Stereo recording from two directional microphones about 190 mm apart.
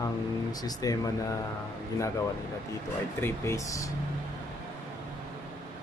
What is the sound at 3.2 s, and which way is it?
Speech, 15° left (ahead or behind).